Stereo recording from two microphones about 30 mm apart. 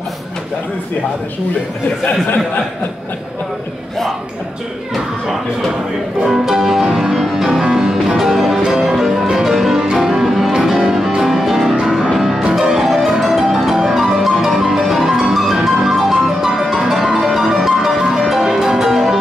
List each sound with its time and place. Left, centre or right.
6.2 s music: centre